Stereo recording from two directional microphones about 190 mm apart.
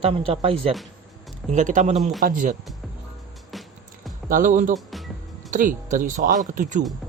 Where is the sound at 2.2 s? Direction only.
45° right (ahead or behind).